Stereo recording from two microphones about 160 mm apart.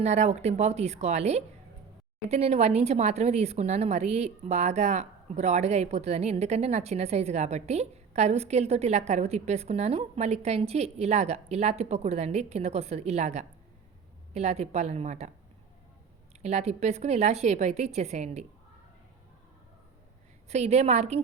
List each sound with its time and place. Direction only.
0.0 s a woman's voice: 40° right (ahead or behind)
16.4 s a woman's voice: 45° right (ahead or behind)
20.5 s a woman's voice: 45° right (ahead or behind)